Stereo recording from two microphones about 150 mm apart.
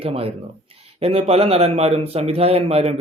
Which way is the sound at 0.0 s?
40° right (ahead or behind).